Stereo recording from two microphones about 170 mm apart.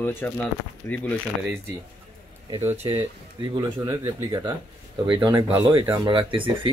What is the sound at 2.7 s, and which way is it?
Speech, 35° right (ahead or behind).